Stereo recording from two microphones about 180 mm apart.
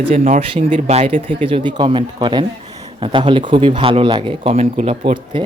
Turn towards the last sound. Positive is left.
turn(degrees=-30)  # may be behind; listen again after turning